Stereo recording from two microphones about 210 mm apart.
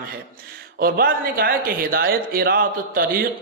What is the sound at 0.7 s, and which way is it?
Speech, 45° right (ahead or behind).